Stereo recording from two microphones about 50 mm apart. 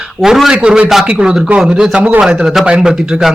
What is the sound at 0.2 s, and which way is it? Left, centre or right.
A man's voice, centre.